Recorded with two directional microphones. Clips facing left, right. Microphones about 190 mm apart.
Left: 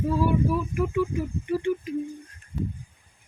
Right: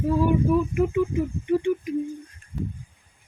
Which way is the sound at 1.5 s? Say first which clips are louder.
Right 3 dB; 15° right (ahead or behind).